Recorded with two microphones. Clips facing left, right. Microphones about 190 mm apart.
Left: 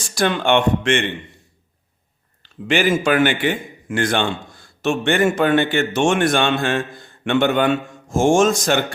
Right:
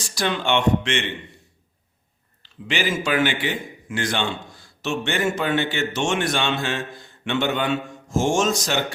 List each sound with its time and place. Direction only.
0.0 s a man's voice: 50° left (ahead or behind)
2.4 s a man's voice: 50° left (ahead or behind)